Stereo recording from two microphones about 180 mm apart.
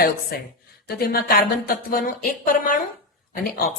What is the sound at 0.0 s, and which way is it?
A woman's voice, 55° left (ahead or behind).